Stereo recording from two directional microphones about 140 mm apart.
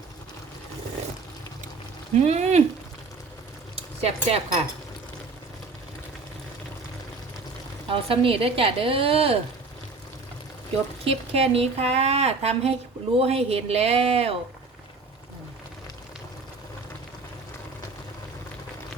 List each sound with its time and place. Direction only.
2.1 s speech: 55° right (ahead or behind)
3.8 s speech: 45° right (ahead or behind)
7.9 s a woman's voice: 40° right (ahead or behind)
11.0 s speech: 45° right (ahead or behind)